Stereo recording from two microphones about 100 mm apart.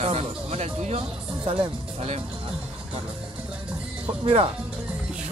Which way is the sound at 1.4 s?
60° right (ahead or behind).